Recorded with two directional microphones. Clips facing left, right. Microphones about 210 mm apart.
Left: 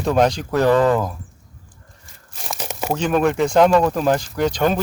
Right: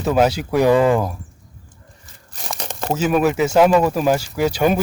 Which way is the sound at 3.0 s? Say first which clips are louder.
Right 1 dB; 5° right (ahead or behind).